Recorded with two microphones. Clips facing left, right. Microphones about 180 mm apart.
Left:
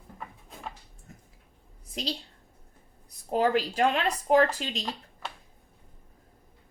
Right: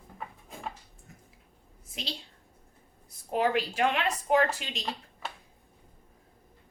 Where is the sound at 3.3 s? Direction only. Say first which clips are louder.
Left 2 dB; 35° left (ahead or behind).